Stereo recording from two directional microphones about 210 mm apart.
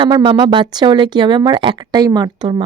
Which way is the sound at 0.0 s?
20° right (ahead or behind).